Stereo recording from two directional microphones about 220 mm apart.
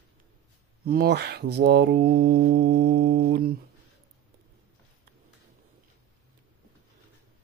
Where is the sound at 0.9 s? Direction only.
45° right (ahead or behind).